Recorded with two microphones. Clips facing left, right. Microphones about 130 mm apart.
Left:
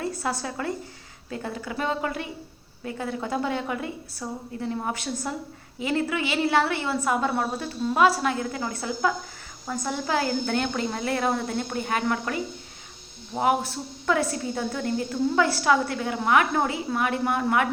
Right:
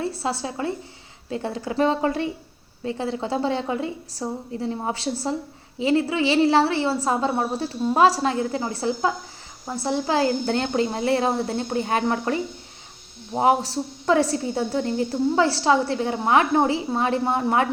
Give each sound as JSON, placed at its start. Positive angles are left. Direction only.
{"t": 0.0, "sound": "a woman's voice", "side_deg": -30}